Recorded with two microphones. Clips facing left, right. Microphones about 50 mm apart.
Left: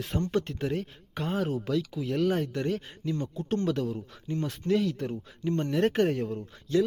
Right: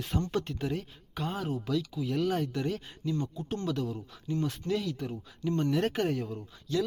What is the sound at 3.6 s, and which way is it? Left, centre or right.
Speech, left.